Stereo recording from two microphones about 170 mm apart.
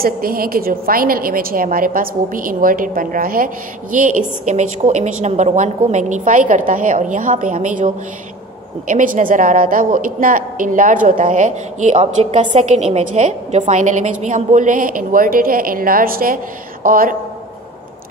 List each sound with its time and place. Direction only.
0.0 s a woman's voice: 60° right (ahead or behind)